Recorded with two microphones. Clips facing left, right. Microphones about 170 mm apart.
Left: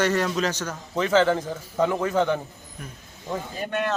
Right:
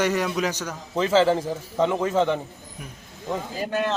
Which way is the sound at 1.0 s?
30° right (ahead or behind).